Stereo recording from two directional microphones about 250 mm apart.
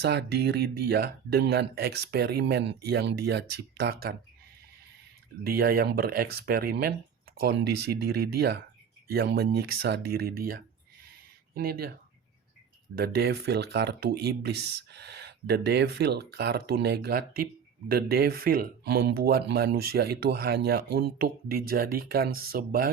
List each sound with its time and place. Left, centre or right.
0.0 s speech: right
5.4 s speech: right
13.0 s speech: right